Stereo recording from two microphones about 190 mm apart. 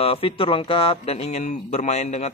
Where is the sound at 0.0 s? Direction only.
30° left (ahead or behind).